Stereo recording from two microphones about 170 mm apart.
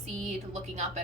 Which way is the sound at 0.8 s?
40° right (ahead or behind).